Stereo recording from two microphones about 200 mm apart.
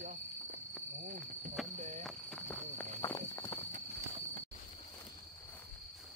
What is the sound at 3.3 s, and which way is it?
Walk, 10° left (ahead or behind).